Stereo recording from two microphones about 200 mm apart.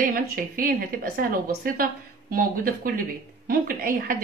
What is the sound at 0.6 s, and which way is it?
A woman's voice, 45° right (ahead or behind).